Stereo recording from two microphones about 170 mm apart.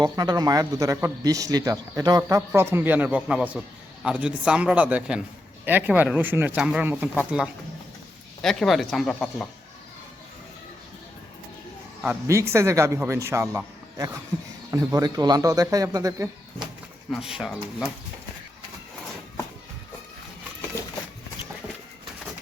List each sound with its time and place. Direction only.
0.0 s a man's voice: 25° right (ahead or behind); by 9.5 s centre (ahead or behind)
12.0 s a man's voice: 15° right (ahead or behind)
17.1 s speech: 5° right (ahead or behind)